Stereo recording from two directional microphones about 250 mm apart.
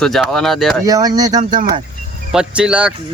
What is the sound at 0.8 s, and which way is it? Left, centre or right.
Speech, centre.